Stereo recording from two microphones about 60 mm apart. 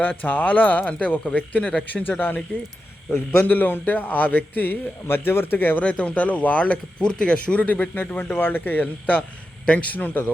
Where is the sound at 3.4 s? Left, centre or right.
Left.